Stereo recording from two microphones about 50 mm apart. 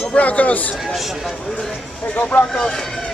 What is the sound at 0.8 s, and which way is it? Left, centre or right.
Speech, centre.